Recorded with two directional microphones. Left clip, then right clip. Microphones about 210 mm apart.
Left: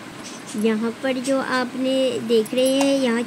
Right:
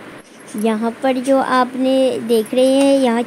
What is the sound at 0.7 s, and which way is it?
Speech, 20° right (ahead or behind).